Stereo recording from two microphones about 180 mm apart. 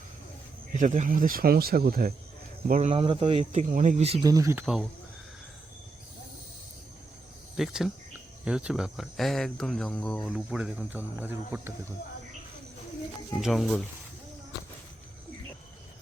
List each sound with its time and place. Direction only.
0.8 s speech: 45° right (ahead or behind)
2.9 s speech: 30° right (ahead or behind)
4.2 s speech: 20° right (ahead or behind)
4.6 s speech: centre (ahead or behind)
7.5 s speech: centre (ahead or behind)
13.4 s speech: centre (ahead or behind)